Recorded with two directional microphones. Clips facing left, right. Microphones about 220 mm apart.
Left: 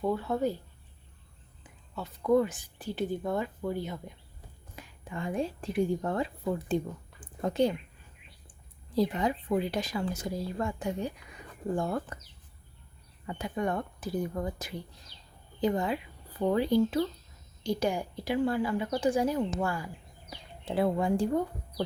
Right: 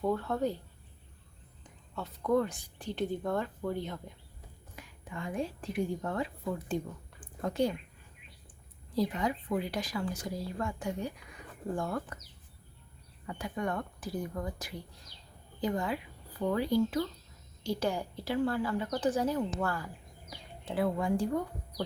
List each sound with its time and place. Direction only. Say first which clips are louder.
0.0 s speech: left 2 dB; 5° left (ahead or behind)
1.6 s speech: left 1 dB; 5° left (ahead or behind)
4.7 s speech: left 3 dB; 30° left (ahead or behind)
7.2 s a sound: left 3 dB; 20° left (ahead or behind)
9.0 s speech: left 3 dB; 25° left (ahead or behind)
13.2 s speech: left 3 dB; 25° left (ahead or behind)
20.7 s speech: left 3 dB; 25° left (ahead or behind)